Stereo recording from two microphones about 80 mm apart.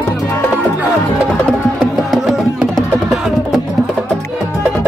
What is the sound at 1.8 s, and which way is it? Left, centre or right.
Music, centre.